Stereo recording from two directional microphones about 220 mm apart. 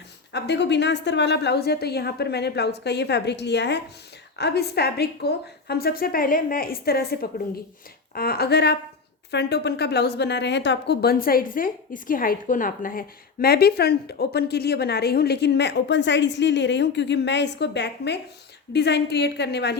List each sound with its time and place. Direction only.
0.3 s a woman's voice: 50° left (ahead or behind)